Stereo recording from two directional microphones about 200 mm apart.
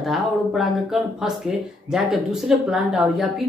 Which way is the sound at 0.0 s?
Centre (ahead or behind).